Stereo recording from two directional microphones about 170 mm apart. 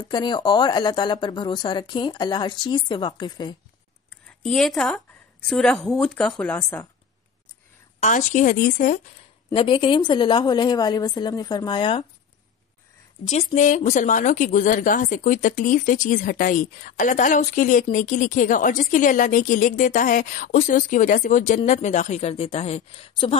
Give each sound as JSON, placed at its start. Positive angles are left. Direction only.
{"t": 0.1, "sound": "speech", "side_deg": 25}
{"t": 4.4, "sound": "a woman's voice", "side_deg": 5}
{"t": 8.0, "sound": "a woman's voice", "side_deg": 45}
{"t": 9.5, "sound": "speech", "side_deg": 30}
{"t": 13.6, "sound": "a woman's voice", "side_deg": 45}